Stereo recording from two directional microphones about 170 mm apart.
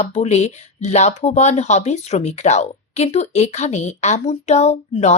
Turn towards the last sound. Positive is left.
turn(degrees=40)  # may be behind; listen again after turning